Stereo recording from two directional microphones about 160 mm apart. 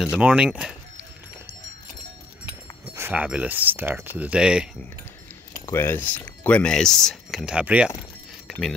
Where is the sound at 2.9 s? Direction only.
15° right (ahead or behind).